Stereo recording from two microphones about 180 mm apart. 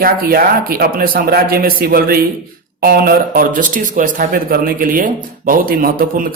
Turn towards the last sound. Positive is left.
turn(degrees=-50)  # may be behind; listen again after turning